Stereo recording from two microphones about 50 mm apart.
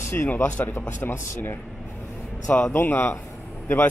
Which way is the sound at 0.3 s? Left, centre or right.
Left.